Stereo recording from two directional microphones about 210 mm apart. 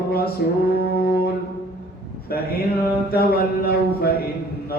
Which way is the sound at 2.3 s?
45° left (ahead or behind).